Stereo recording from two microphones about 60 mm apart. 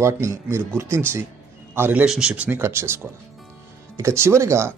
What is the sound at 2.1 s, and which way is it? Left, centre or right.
Speech, centre.